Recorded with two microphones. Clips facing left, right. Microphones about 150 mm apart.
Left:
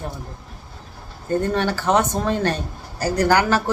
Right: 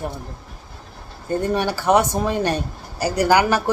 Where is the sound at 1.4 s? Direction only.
15° right (ahead or behind).